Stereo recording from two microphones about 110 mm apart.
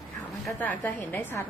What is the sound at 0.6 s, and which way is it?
Speech, 15° left (ahead or behind).